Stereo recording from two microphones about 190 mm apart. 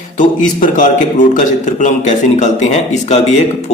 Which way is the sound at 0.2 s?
45° left (ahead or behind).